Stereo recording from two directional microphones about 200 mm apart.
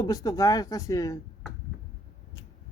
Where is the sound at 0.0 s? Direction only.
15° left (ahead or behind).